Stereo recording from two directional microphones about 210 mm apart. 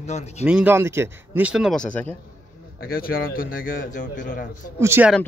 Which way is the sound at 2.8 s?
45° left (ahead or behind).